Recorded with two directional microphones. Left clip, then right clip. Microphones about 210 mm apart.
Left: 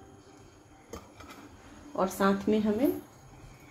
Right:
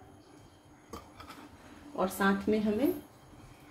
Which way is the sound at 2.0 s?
20° left (ahead or behind).